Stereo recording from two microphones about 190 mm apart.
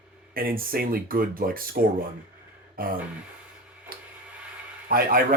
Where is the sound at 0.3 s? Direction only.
50° right (ahead or behind).